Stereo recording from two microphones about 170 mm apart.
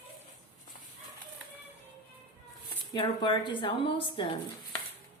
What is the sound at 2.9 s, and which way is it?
Speech, 30° left (ahead or behind).